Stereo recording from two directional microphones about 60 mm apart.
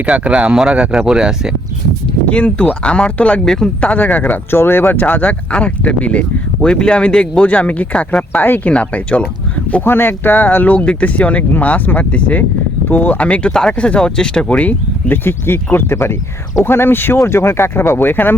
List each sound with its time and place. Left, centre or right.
0.0 s speech: centre
2.3 s speech: centre
3.4 s speech: centre
3.8 s speech: left
4.5 s speech: left
9.8 s speech: left
13.5 s speech: centre
15.1 s speech: left
17.2 s speech: left